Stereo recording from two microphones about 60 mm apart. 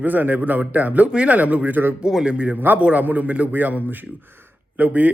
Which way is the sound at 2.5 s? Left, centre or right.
Right.